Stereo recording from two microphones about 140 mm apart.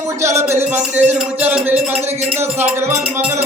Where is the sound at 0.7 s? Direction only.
10° right (ahead or behind).